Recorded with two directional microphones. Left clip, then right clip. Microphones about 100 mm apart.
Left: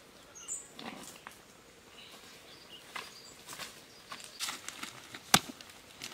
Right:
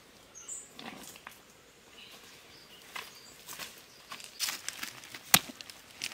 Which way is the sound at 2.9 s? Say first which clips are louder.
Right 1 dB; centre (ahead or behind).